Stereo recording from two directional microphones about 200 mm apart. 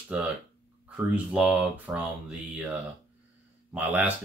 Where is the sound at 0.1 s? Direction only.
5° right (ahead or behind).